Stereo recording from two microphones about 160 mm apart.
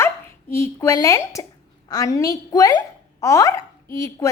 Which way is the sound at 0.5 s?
15° left (ahead or behind).